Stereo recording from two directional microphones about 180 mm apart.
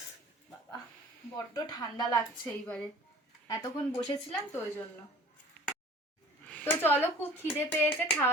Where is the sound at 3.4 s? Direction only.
20° left (ahead or behind).